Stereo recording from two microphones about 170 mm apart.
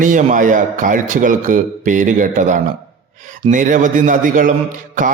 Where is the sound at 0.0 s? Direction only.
50° right (ahead or behind).